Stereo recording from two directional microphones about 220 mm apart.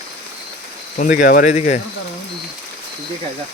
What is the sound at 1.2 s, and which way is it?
Speech, 40° left (ahead or behind).